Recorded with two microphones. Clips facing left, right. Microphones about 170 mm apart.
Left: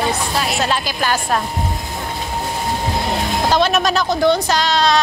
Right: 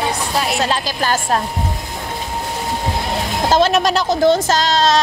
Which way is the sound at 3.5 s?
35° right (ahead or behind).